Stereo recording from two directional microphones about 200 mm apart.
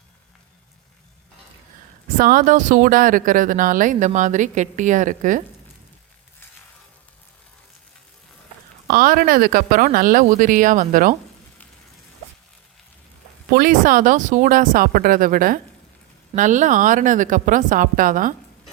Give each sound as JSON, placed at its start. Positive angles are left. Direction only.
{"t": 2.1, "sound": "speech", "side_deg": -45}
{"t": 8.9, "sound": "speech", "side_deg": -45}
{"t": 13.5, "sound": "speech", "side_deg": -45}